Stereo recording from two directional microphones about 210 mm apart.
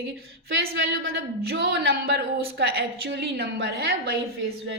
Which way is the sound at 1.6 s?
50° right (ahead or behind).